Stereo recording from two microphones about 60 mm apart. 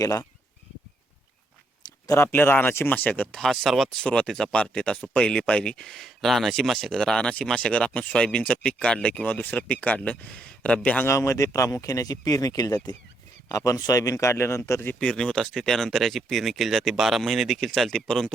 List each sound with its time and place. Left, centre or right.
0.0 s speech: left
2.0 s speech: left
2.3 s speech: left
3.3 s speech: centre
3.8 s speech: centre
11.0 s speech: left
13.5 s a man's voice: left
14.9 s speech: centre